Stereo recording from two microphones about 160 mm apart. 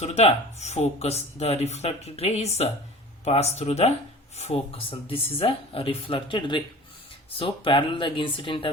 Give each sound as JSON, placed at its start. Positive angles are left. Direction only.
{"t": 0.0, "sound": "speech", "side_deg": 40}